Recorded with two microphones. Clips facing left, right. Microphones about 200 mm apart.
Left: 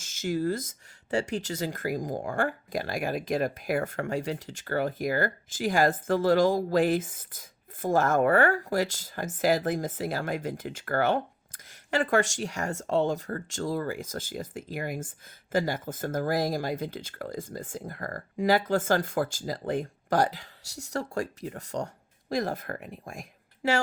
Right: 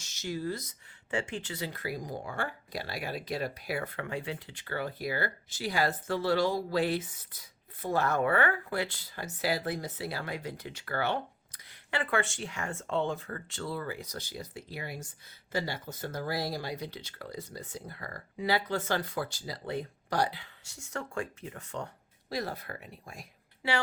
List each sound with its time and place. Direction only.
0.0 s speech: 50° left (ahead or behind)